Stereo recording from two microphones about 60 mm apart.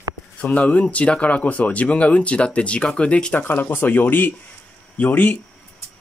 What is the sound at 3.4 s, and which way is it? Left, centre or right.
Speech, left.